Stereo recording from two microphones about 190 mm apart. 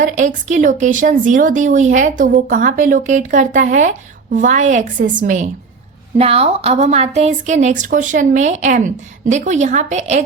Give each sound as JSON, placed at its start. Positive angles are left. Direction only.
{"t": 0.0, "sound": "a woman's voice", "side_deg": -40}
{"t": 6.1, "sound": "speech", "side_deg": -30}